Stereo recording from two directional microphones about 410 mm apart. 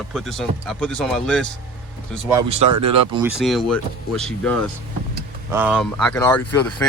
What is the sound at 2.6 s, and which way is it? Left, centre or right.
Speech, right.